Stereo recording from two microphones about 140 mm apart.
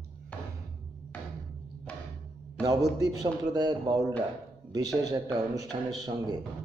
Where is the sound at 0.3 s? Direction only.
10° left (ahead or behind).